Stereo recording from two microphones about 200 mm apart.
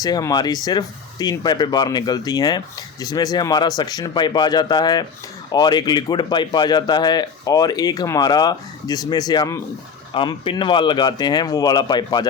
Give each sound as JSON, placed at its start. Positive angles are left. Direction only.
{"t": 0.0, "sound": "speech", "side_deg": 20}